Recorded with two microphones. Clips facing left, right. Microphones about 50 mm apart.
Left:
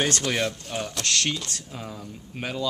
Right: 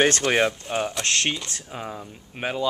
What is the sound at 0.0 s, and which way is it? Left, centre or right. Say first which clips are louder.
Speech: right 5 dB; right.